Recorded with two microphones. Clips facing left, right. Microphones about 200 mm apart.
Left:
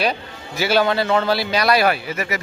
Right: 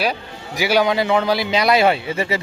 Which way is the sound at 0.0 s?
10° right (ahead or behind).